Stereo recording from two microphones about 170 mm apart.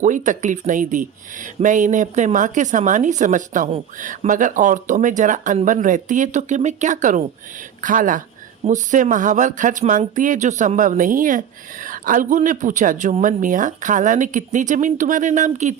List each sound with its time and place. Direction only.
0.0 s speech: 50° right (ahead or behind)